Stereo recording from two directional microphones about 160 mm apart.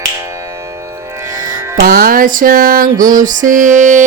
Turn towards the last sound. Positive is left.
turn(degrees=-55)  # may be behind; listen again after turning